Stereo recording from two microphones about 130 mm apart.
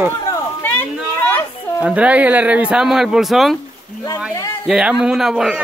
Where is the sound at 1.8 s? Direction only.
10° right (ahead or behind).